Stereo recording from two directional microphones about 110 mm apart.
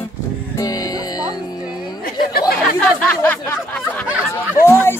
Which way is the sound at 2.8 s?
10° left (ahead or behind).